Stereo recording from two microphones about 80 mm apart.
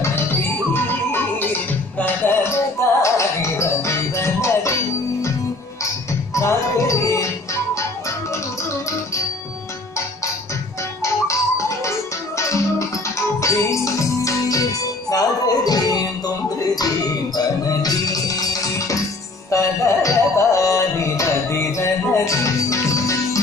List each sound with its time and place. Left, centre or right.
0.0 s music: left
6.3 s music: left
11.0 s music: left